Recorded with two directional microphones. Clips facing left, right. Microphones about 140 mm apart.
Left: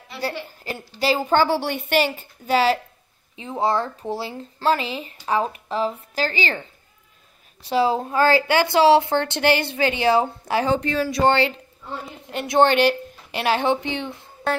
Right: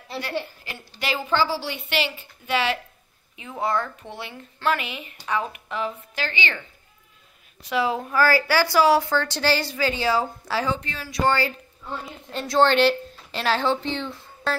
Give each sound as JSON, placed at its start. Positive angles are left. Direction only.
{"t": 0.7, "sound": "speech", "side_deg": 35}
{"t": 1.3, "sound": "a woman's voice", "side_deg": 55}
{"t": 7.6, "sound": "speech", "side_deg": 30}
{"t": 10.7, "sound": "speech", "side_deg": 60}
{"t": 11.2, "sound": "a woman's voice", "side_deg": 25}